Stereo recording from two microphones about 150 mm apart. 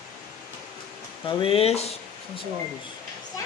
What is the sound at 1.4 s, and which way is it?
Speech, 40° left (ahead or behind).